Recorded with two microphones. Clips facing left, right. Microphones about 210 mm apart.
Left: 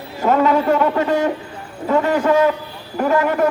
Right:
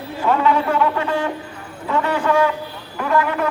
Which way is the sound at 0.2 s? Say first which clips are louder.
Left 3 dB; 40° left (ahead or behind).